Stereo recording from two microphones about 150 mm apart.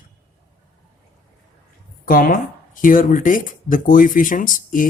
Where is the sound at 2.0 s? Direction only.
65° left (ahead or behind).